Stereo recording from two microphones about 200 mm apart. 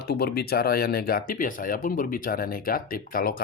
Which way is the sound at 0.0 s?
50° left (ahead or behind).